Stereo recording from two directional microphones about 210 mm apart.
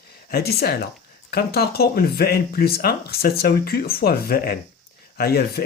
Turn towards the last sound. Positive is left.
turn(degrees=45)  # may be behind; listen again after turning